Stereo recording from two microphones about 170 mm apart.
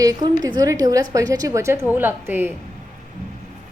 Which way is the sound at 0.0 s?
20° right (ahead or behind).